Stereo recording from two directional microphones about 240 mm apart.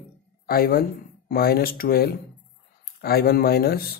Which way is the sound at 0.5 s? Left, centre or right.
Left.